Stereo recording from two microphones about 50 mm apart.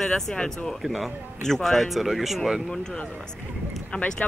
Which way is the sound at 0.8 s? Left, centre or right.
Centre.